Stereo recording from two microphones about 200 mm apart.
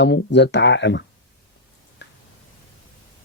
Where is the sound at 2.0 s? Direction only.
60° left (ahead or behind).